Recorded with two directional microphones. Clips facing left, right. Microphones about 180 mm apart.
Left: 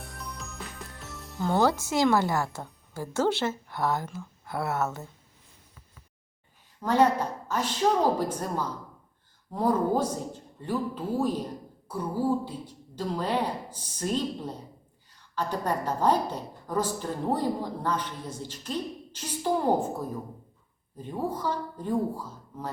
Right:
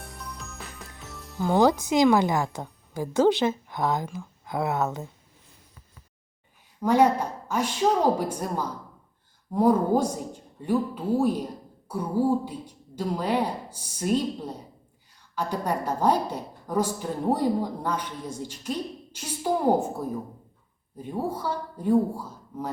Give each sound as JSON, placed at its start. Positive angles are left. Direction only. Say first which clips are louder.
{"t": 0.0, "sound": "music", "louder": "even", "side_deg": 0}
{"t": 1.5, "sound": "a woman's voice", "louder": "right 4 dB", "side_deg": -15}
{"t": 6.8, "sound": "a woman's voice", "louder": "right 2 dB", "side_deg": -10}
{"t": 21.0, "sound": "a woman's voice", "louder": "right 1 dB", "side_deg": -10}